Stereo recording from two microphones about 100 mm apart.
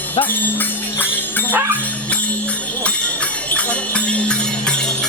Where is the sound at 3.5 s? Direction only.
15° left (ahead or behind).